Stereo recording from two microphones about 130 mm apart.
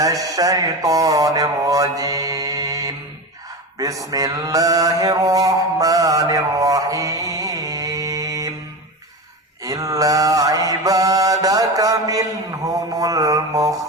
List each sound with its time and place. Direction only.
0.0 s mantra: 25° right (ahead or behind)
9.6 s mantra: 25° right (ahead or behind)